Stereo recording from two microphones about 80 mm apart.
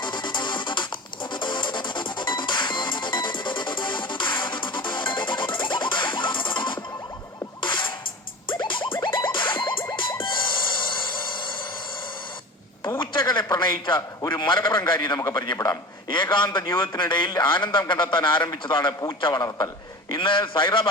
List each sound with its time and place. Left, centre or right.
0.0 s music: left
13.0 s a man's voice: left
19.3 s a man's voice: left
20.1 s a man's voice: left